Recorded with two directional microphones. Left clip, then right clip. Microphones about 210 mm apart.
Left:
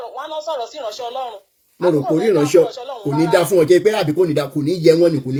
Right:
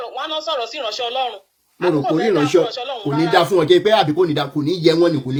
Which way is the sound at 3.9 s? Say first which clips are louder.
Right 2 dB; 40° right (ahead or behind).